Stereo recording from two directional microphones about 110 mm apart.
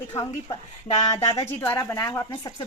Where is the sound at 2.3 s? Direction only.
40° left (ahead or behind).